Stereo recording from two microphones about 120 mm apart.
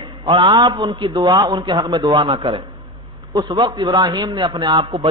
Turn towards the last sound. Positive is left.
turn(degrees=-45)  # may be behind; listen again after turning